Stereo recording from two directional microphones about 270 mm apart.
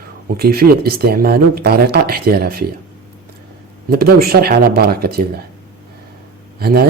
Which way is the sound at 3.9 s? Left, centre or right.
Right.